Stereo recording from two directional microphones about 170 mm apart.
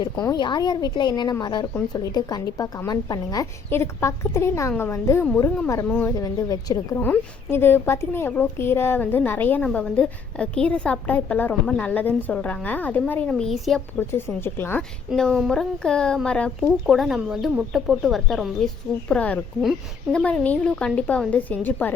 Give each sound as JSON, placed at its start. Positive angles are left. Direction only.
{"t": 0.2, "sound": "a woman's voice", "side_deg": 25}
{"t": 14.1, "sound": "a woman's voice", "side_deg": 15}
{"t": 15.1, "sound": "a woman's voice", "side_deg": 0}